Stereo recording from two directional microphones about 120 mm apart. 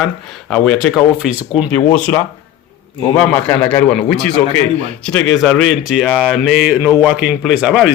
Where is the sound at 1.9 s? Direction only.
10° left (ahead or behind); by 7.9 s 5° right (ahead or behind).